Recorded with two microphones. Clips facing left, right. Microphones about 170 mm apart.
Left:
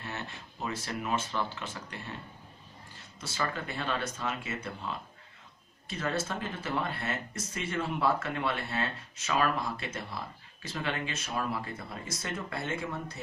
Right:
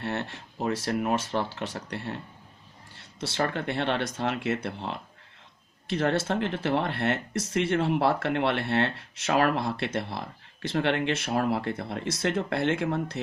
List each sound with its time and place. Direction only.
0.0 s speech: 65° right (ahead or behind)